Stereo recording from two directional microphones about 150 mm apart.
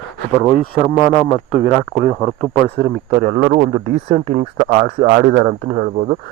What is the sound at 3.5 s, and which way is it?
Speech, 60° right (ahead or behind).